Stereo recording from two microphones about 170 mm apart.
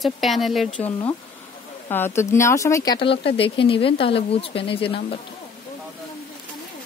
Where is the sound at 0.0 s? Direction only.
Centre (ahead or behind); by 5.0 s 30° left (ahead or behind).